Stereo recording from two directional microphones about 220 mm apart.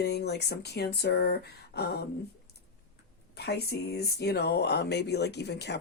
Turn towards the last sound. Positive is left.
turn(degrees=50)  # may be behind; listen again after turning